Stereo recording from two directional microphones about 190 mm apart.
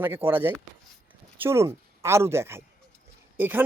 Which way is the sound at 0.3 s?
10° right (ahead or behind).